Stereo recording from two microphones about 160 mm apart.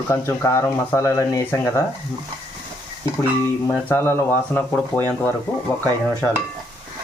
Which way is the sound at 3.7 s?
10° left (ahead or behind).